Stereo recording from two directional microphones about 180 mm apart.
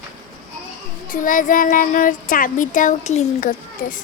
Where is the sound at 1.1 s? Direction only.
50° left (ahead or behind).